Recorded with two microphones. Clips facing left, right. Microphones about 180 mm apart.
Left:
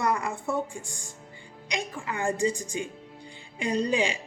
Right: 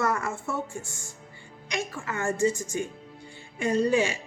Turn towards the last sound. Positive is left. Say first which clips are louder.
# right 2 dB
turn(degrees=15)  # may be behind; listen again after turning